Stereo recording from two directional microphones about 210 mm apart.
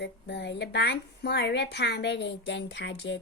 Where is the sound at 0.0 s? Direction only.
55° left (ahead or behind).